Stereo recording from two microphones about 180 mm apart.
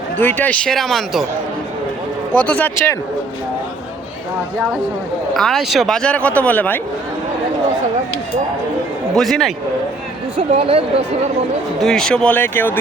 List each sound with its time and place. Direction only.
0.2 s speech: 10° left (ahead or behind)
2.3 s speech: 10° left (ahead or behind)
5.3 s speech: centre (ahead or behind)
9.1 s speech: centre (ahead or behind)
10.3 s speech: 35° right (ahead or behind)
11.8 s speech: 5° left (ahead or behind)